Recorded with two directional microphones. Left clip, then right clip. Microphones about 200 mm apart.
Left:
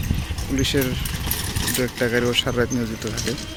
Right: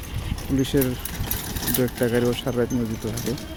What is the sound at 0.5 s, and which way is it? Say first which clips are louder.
Speech: left 1 dB; 20° right (ahead or behind).